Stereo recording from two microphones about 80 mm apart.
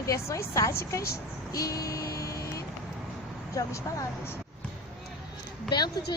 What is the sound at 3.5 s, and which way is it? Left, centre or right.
Speech, left.